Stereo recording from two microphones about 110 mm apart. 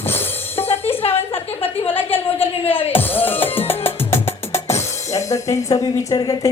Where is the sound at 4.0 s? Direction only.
20° left (ahead or behind).